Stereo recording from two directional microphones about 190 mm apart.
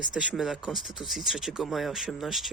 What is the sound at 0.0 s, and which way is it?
Speech, 5° right (ahead or behind).